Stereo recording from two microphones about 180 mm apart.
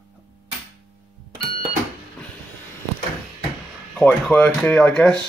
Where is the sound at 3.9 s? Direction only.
5° left (ahead or behind).